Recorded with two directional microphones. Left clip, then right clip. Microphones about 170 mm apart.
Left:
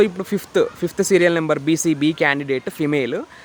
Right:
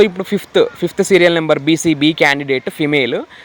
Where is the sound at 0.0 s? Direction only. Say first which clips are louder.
Right 5 dB; 5° right (ahead or behind).